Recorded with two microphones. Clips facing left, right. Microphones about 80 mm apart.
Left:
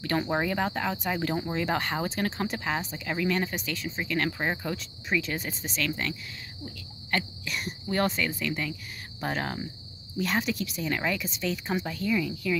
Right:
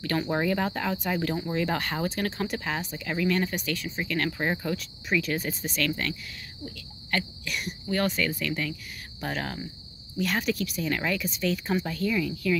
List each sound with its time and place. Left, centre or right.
0.0 s speech: left
4.4 s speech: centre